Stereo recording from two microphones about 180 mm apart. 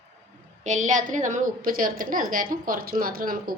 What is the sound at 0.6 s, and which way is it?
Speech, 40° right (ahead or behind).